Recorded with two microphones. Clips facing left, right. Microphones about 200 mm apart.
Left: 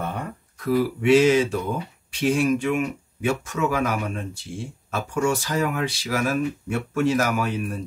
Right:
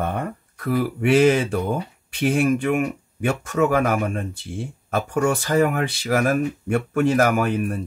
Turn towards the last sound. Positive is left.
turn(degrees=-55)  # may be behind; listen again after turning